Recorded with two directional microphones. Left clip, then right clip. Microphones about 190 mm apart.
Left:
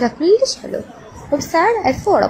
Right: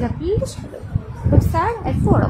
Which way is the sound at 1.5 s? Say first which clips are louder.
Left 11 dB; 20° left (ahead or behind).